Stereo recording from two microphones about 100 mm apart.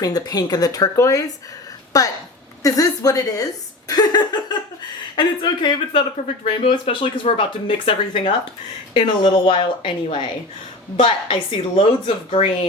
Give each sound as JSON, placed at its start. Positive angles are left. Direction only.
{"t": 0.0, "sound": "speech", "side_deg": 40}
{"t": 3.8, "sound": "chuckle", "side_deg": 40}
{"t": 5.1, "sound": "speech", "side_deg": 50}
{"t": 8.9, "sound": "speech", "side_deg": 55}